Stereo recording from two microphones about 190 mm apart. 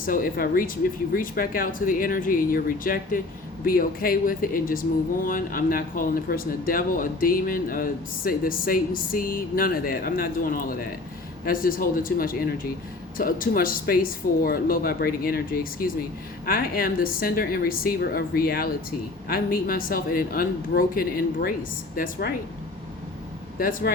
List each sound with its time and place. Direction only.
0.0 s speech: 50° left (ahead or behind)
23.6 s speech: 50° left (ahead or behind)